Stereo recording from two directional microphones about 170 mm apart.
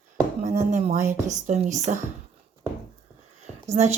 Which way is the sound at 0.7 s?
45° right (ahead or behind).